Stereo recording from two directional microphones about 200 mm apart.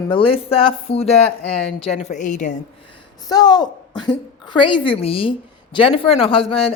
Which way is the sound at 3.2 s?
20° left (ahead or behind).